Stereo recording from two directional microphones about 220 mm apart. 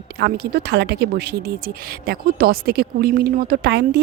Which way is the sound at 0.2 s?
50° right (ahead or behind).